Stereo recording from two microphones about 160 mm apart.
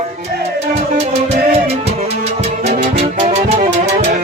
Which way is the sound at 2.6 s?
40° right (ahead or behind).